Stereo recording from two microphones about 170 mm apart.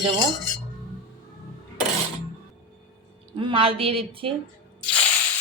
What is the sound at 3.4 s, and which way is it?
Speech, 30° right (ahead or behind).